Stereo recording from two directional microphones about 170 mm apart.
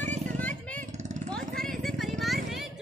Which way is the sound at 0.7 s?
45° right (ahead or behind).